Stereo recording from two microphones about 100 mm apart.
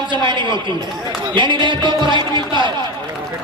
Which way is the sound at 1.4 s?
55° right (ahead or behind).